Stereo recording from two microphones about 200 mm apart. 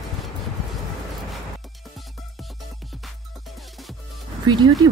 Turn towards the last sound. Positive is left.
turn(degrees=-20)  # may be behind; listen again after turning